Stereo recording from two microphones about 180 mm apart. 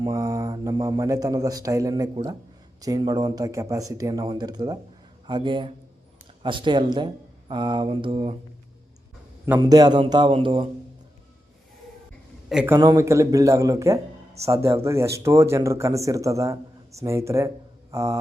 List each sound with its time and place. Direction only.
0.0 s speech: 20° right (ahead or behind)
9.6 s speech: 20° right (ahead or behind)
12.5 s a man's voice: 5° right (ahead or behind)
12.7 s speech: 20° right (ahead or behind)
17.9 s mantra: 20° right (ahead or behind)